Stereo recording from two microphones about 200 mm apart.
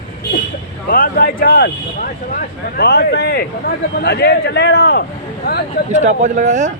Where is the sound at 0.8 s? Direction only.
45° left (ahead or behind).